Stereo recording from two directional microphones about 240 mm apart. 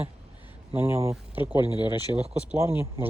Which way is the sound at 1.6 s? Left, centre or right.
Centre.